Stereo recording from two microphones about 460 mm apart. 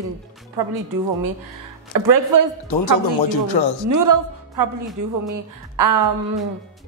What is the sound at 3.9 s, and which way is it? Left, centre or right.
A woman's voice, right.